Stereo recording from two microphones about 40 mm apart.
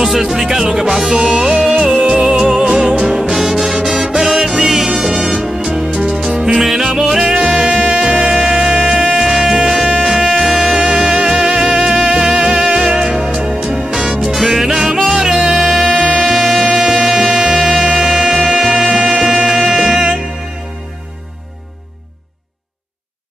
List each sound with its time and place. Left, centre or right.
0.0 s music: centre
14.2 s music: centre